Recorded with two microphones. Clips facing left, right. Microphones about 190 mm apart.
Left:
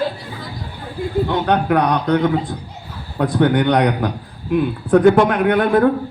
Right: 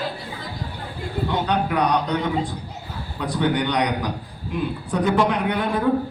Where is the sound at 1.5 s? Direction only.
55° left (ahead or behind).